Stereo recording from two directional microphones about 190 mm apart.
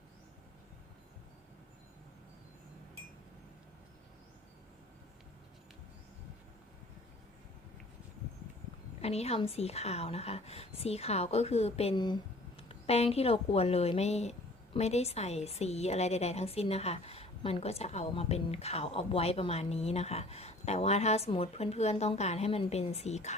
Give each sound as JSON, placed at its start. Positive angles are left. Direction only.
{"t": 9.0, "sound": "a woman's voice", "side_deg": 35}